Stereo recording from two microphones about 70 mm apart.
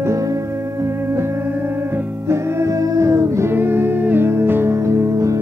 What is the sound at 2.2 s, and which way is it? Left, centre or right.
Music, right.